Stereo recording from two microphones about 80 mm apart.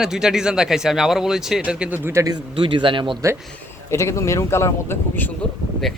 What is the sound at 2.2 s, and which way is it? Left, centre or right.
Speech, right.